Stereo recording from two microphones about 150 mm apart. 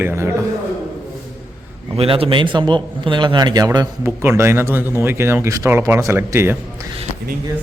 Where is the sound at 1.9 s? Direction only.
40° right (ahead or behind); by 6.8 s 15° right (ahead or behind).